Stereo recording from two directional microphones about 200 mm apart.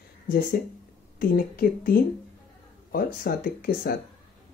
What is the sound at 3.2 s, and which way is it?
Speech, 50° left (ahead or behind).